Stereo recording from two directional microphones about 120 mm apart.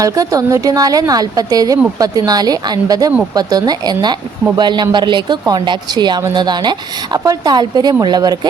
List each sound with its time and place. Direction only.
0.0 s a woman's voice: 30° right (ahead or behind)